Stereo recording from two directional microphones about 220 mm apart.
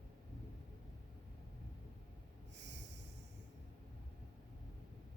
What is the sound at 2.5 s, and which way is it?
Snort, 50° right (ahead or behind).